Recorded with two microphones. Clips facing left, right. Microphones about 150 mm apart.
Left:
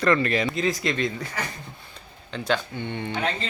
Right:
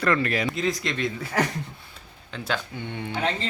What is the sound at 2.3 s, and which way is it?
Speech, 5° right (ahead or behind).